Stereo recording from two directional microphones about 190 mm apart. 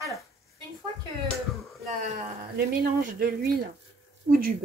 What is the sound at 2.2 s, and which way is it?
Speech, 50° right (ahead or behind).